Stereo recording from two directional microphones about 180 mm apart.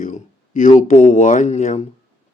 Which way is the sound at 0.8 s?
45° left (ahead or behind).